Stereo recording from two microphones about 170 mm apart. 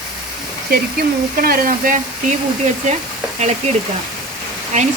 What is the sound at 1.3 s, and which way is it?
Speech, 60° right (ahead or behind).